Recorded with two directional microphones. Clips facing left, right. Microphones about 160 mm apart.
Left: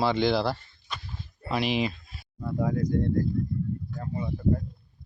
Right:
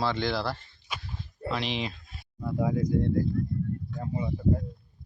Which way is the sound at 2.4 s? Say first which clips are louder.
Even; 10° right (ahead or behind).